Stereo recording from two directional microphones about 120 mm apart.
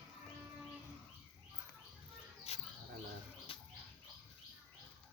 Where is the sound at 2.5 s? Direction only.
60° left (ahead or behind).